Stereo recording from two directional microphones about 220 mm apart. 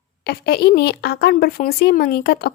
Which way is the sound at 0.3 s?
45° left (ahead or behind).